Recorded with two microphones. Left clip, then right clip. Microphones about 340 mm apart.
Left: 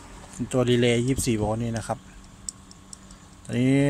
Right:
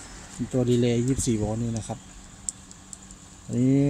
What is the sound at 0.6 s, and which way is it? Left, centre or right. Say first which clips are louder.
Speech: left 2 dB; left.